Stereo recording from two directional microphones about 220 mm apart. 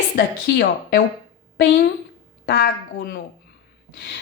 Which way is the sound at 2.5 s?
45° left (ahead or behind).